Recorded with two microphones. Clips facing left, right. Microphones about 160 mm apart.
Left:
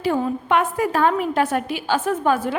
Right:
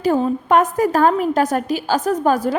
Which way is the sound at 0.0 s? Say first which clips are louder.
Right 4 dB; 40° right (ahead or behind).